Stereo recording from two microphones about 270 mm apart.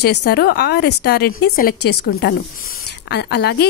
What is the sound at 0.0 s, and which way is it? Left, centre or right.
Speech, left.